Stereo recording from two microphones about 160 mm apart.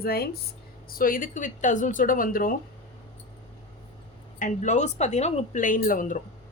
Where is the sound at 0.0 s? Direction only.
75° left (ahead or behind).